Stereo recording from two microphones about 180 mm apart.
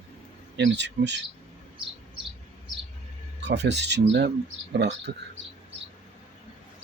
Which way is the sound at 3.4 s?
70° right (ahead or behind).